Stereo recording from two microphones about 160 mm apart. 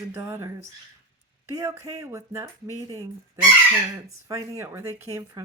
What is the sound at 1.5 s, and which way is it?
Speech, 20° right (ahead or behind).